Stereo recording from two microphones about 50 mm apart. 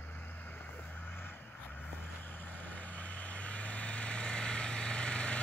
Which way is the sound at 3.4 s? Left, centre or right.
Left.